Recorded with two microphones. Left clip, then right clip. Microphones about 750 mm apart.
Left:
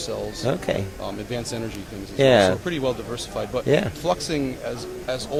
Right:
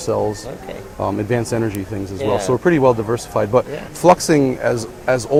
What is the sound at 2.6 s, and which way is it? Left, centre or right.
Speech, right.